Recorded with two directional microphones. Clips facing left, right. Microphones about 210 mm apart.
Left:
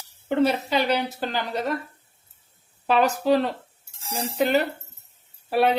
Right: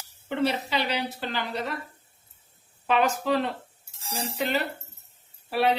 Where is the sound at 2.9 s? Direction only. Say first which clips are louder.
Left 4 dB; 35° left (ahead or behind).